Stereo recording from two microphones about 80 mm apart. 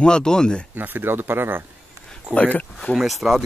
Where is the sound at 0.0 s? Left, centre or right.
Centre.